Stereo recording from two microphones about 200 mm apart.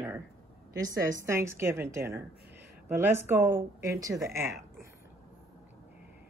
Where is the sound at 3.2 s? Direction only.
15° right (ahead or behind).